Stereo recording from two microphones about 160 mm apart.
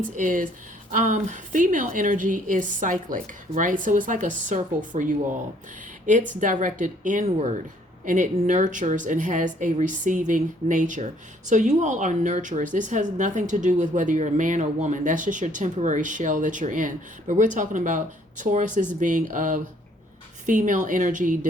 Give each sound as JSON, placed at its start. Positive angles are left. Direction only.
{"t": 0.0, "sound": "a woman's voice", "side_deg": -55}
{"t": 6.4, "sound": "a woman's voice", "side_deg": -55}